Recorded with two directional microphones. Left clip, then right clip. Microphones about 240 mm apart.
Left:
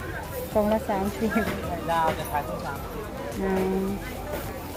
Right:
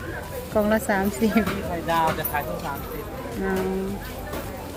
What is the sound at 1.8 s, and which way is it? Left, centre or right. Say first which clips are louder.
Speech: right 2 dB; right.